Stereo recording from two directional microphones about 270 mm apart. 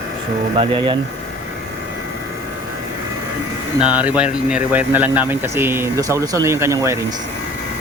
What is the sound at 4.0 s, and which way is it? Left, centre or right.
Speech, centre.